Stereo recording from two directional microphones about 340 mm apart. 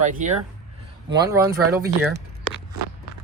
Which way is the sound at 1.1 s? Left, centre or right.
Centre.